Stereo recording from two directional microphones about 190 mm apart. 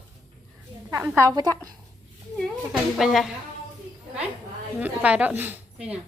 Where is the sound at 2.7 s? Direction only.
Centre (ahead or behind).